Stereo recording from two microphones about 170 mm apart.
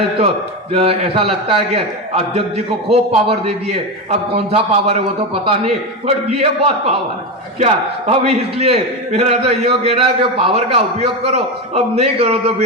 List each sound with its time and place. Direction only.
0.7 s a man's voice: 35° right (ahead or behind)